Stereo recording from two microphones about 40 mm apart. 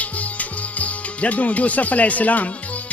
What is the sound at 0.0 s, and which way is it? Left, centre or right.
Music, left.